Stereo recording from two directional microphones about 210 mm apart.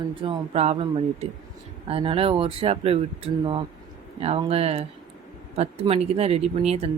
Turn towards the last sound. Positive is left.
turn(degrees=-30)  # may be behind; listen again after turning